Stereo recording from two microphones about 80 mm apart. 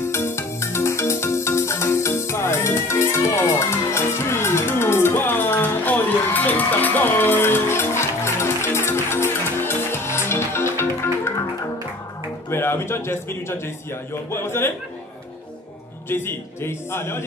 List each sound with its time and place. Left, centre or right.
0.0 s music: left
12.4 s a man's voice: left
16.1 s a man's voice: left